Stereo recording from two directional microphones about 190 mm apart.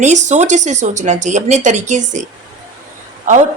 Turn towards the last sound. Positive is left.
turn(degrees=-40)  # may be behind; listen again after turning